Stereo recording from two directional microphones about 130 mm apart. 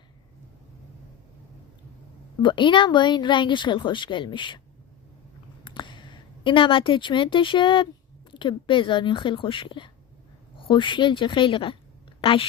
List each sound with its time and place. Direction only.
2.4 s speech: 35° left (ahead or behind)
5.6 s a woman's voice: 40° left (ahead or behind)